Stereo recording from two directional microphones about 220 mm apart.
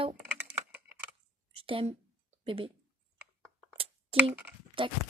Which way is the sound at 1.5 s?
25° right (ahead or behind).